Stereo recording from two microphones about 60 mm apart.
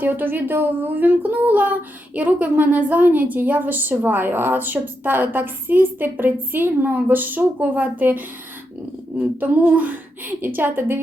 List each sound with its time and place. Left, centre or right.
0.0 s speech: right